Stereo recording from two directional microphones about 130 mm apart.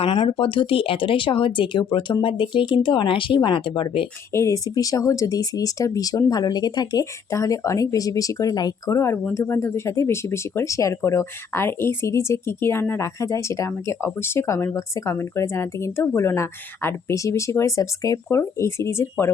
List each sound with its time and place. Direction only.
0.0 s speech: 45° left (ahead or behind)
4.3 s speech: 25° left (ahead or behind)